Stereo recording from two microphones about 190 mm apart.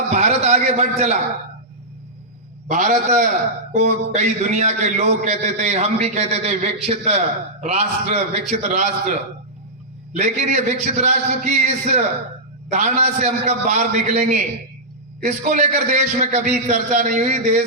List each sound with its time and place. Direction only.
0.1 s a man's voice: 35° right (ahead or behind)
2.6 s a man's voice: 40° right (ahead or behind)
10.2 s a man's voice: 40° right (ahead or behind)